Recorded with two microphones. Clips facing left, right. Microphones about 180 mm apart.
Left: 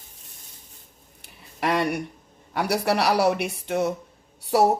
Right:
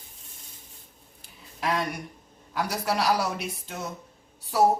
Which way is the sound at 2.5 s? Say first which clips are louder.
Left 5 dB; 70° left (ahead or behind).